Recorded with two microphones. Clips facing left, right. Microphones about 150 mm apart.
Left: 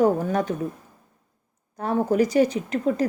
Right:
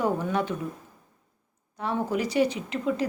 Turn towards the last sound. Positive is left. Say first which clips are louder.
# left 4 dB
turn(degrees=45)  # may be behind; listen again after turning